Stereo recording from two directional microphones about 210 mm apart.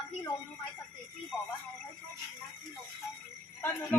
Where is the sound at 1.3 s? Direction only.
Centre (ahead or behind).